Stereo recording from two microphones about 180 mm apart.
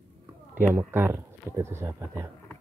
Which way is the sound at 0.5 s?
10° right (ahead or behind).